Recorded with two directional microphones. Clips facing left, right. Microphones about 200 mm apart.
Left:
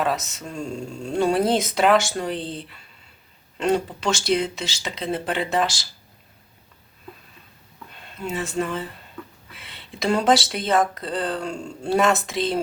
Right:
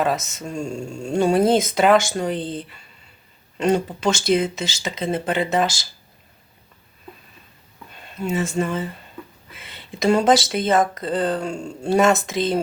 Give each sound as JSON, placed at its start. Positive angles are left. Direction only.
{"t": 0.0, "sound": "speech", "side_deg": 0}
{"t": 8.1, "sound": "speech", "side_deg": 0}